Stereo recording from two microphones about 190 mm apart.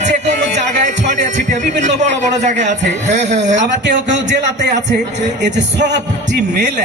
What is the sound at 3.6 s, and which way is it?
A man's voice, 70° right (ahead or behind).